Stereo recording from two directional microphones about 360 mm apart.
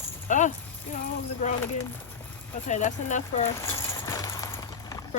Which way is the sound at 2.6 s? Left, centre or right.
Centre.